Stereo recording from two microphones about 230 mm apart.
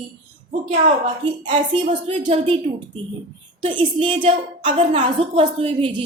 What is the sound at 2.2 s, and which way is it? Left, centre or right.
Speech, right.